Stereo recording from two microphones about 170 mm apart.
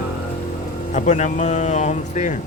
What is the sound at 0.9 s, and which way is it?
Speech, 45° left (ahead or behind).